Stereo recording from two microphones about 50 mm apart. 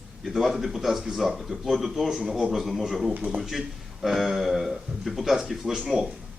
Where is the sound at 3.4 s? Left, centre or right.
Centre.